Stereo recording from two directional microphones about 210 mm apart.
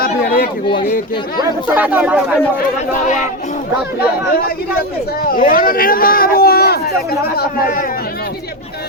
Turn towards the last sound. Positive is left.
turn(degrees=45)  # may be behind; listen again after turning